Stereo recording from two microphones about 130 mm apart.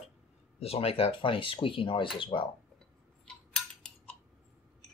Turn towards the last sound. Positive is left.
turn(degrees=10)  # may be behind; listen again after turning